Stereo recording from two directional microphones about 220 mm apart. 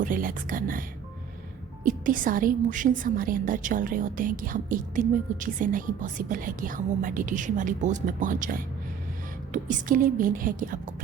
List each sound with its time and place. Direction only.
0.0 s a woman's voice: 40° right (ahead or behind)